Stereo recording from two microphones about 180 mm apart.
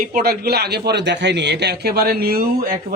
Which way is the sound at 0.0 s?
55° right (ahead or behind).